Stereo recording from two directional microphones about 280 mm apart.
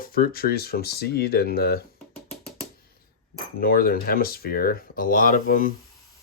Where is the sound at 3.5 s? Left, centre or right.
Left.